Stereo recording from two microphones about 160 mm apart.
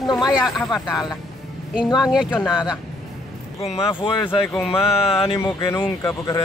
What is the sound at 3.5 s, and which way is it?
Mantra, 40° left (ahead or behind).